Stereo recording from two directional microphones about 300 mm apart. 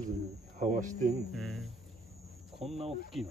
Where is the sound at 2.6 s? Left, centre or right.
Right.